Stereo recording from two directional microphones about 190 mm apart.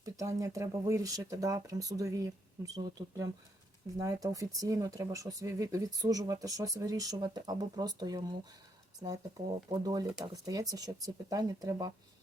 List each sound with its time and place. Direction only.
0.0 s speech: 15° right (ahead or behind)
9.6 s speech: 20° right (ahead or behind)